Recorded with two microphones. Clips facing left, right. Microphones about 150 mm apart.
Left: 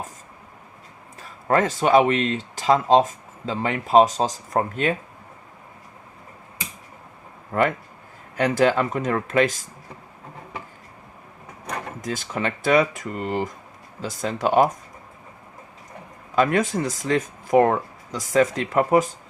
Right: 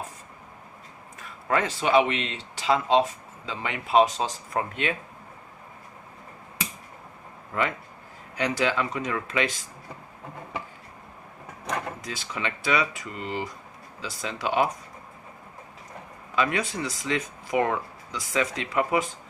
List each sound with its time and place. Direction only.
1.5 s speech: 45° left (ahead or behind)
8.4 s speech: 50° left (ahead or behind)
12.0 s speech: 45° left (ahead or behind)
16.3 s speech: 45° left (ahead or behind)